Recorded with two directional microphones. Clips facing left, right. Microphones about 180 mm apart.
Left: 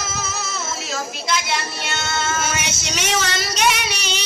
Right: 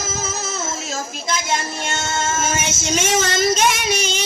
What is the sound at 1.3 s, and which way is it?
Child singing, 45° right (ahead or behind).